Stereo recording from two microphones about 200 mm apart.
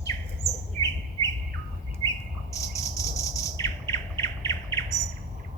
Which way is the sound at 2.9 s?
15° left (ahead or behind).